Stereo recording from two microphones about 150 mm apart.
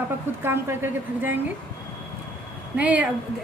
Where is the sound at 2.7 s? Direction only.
10° right (ahead or behind).